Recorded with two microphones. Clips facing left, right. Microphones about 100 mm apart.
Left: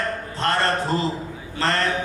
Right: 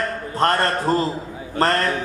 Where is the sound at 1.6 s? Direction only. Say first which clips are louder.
Right 4 dB; 45° right (ahead or behind).